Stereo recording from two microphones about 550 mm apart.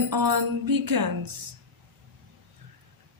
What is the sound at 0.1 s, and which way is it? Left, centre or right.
Speech, right.